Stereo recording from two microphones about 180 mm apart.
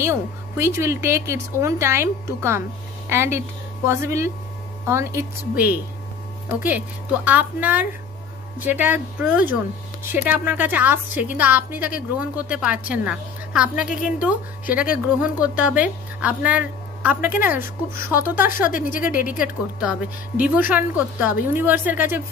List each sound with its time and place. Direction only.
0.0 s a woman's voice: 15° right (ahead or behind)
18.7 s a woman's voice: 50° left (ahead or behind)
19.8 s a woman's voice: 5° right (ahead or behind)